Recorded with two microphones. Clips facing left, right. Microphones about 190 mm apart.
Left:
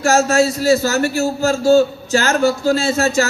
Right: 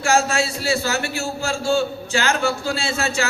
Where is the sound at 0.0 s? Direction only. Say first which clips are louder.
Left 6 dB; 40° left (ahead or behind).